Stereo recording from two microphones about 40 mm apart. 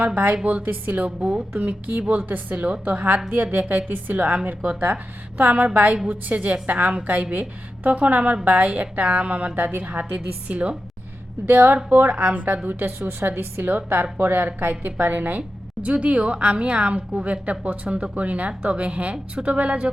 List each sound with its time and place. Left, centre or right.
0.4 s a woman's voice: right
1.0 s a woman's voice: right
9.6 s a woman's voice: right
11.4 s speech: right
11.9 s speech: right
12.8 s a woman's voice: right